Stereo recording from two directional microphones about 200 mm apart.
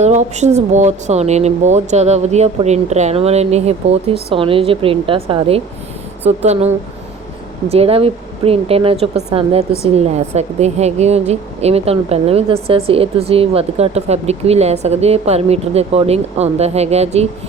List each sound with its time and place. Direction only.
0.0 s speech: 35° right (ahead or behind)
7.7 s speech: 30° right (ahead or behind)